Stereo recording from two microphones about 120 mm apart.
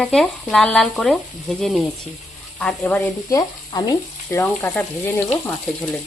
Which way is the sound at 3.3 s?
35° left (ahead or behind).